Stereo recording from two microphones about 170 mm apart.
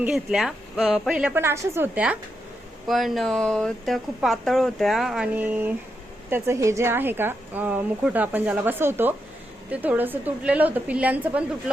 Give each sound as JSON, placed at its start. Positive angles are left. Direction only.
{"t": 0.0, "sound": "speech", "side_deg": 0}